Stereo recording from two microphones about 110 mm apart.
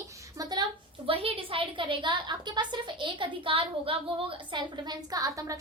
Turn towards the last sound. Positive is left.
turn(degrees=-30)  # may be behind; listen again after turning